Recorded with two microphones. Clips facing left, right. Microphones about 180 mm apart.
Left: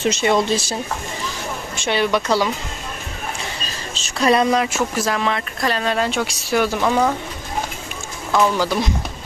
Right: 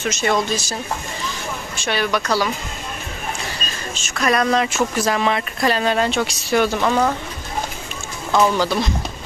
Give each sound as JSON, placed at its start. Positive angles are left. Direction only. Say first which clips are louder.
{"t": 0.0, "sound": "speech", "louder": "left 3 dB", "side_deg": 30}
{"t": 1.8, "sound": "speech", "louder": "left 2 dB", "side_deg": 25}
{"t": 4.0, "sound": "speech", "louder": "left 3 dB", "side_deg": 30}
{"t": 4.9, "sound": "speech", "louder": "right 2 dB", "side_deg": 0}
{"t": 8.3, "sound": "speech", "louder": "right 1 dB", "side_deg": 5}